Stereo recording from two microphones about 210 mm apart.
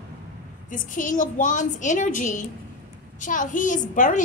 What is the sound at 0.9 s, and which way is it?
Speech, 40° left (ahead or behind).